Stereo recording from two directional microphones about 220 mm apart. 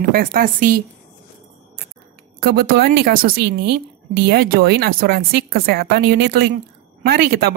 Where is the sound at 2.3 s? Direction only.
45° right (ahead or behind).